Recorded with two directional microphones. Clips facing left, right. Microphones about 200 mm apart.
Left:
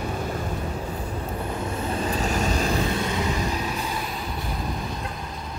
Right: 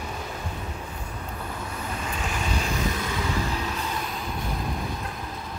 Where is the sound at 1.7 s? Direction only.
30° left (ahead or behind).